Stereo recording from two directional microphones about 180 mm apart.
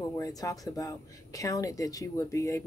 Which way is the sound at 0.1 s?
20° left (ahead or behind).